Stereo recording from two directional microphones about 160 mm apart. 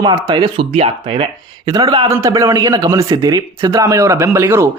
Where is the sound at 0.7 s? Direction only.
35° right (ahead or behind); by 4.7 s 15° right (ahead or behind).